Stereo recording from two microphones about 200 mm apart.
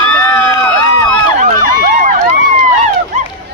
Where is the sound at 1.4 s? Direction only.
40° right (ahead or behind).